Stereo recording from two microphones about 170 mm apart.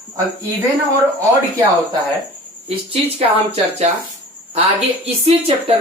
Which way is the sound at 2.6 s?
35° right (ahead or behind).